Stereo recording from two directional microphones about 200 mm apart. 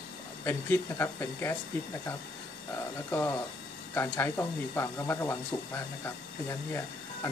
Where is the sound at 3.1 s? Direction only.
10° left (ahead or behind).